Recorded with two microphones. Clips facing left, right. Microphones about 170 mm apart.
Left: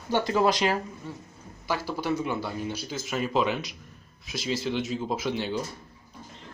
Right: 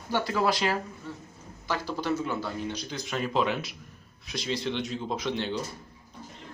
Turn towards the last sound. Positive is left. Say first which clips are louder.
# left 1 dB
turn(degrees=5)  # may be behind; listen again after turning